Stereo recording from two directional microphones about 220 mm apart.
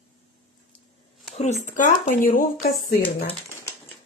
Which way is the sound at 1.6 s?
35° left (ahead or behind).